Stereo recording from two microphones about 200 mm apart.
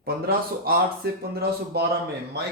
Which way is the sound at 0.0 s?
50° right (ahead or behind).